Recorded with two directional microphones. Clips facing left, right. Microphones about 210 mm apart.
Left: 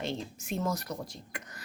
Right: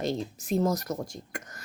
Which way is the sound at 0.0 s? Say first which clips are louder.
Right 5 dB; 40° right (ahead or behind).